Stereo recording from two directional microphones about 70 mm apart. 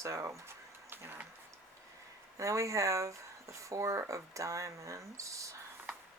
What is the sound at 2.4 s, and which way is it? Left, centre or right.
Speech, right.